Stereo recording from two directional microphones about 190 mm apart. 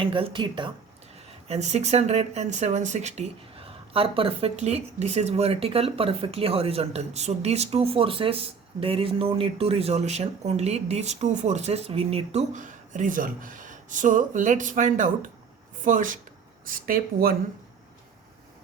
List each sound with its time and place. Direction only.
0.0 s speech: 25° right (ahead or behind)
1.5 s speech: 35° right (ahead or behind)